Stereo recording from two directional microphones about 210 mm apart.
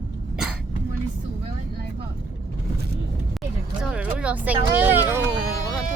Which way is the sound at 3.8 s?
5° right (ahead or behind).